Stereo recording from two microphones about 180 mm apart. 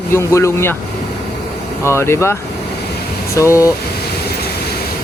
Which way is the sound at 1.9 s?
15° left (ahead or behind).